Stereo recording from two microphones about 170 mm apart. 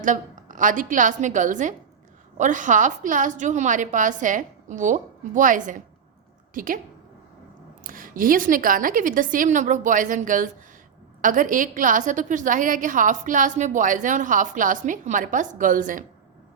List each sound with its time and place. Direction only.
0.0 s a woman's voice: 50° right (ahead or behind)
7.9 s a woman's voice: 55° right (ahead or behind)